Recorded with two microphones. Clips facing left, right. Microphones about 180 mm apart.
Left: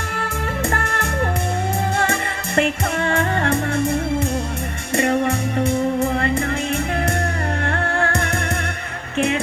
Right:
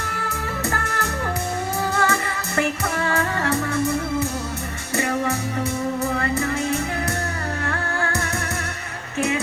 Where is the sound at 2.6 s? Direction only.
30° left (ahead or behind).